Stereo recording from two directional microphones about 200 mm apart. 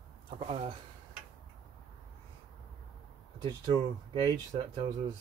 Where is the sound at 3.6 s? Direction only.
20° right (ahead or behind).